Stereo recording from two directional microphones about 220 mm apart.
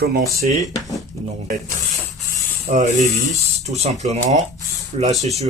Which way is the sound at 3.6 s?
30° right (ahead or behind).